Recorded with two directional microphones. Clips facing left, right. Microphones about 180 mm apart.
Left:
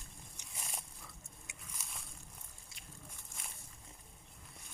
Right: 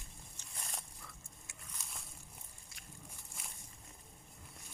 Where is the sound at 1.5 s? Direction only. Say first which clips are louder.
Left 1 dB; 20° left (ahead or behind).